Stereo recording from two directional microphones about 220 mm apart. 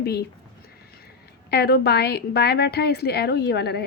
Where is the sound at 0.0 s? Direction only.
45° left (ahead or behind).